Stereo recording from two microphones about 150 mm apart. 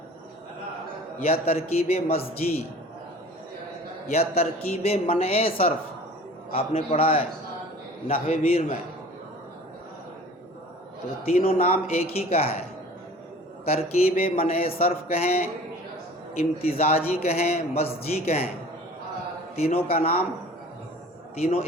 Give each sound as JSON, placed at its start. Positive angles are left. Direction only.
{"t": 1.2, "sound": "a man's voice", "side_deg": 40}
{"t": 4.1, "sound": "a man's voice", "side_deg": 45}
{"t": 11.2, "sound": "a man's voice", "side_deg": 40}
{"t": 14.2, "sound": "a man's voice", "side_deg": 40}
{"t": 19.5, "sound": "a man's voice", "side_deg": 45}
{"t": 21.3, "sound": "a man's voice", "side_deg": 45}